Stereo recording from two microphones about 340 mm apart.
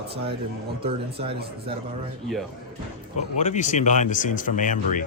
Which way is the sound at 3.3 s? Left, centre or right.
Left.